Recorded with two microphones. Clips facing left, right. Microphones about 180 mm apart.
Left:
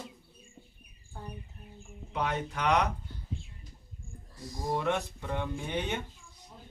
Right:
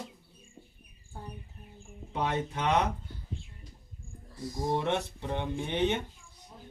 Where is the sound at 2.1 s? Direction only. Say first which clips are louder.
Right 1 dB; 25° right (ahead or behind).